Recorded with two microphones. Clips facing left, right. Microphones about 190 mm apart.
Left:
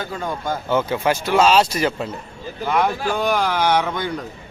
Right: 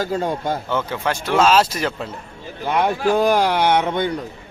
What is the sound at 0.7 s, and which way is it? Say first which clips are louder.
Speech: left 8 dB; 10° left (ahead or behind).